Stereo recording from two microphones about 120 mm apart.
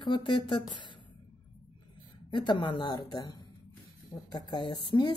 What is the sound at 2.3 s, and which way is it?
A woman's voice, 40° left (ahead or behind).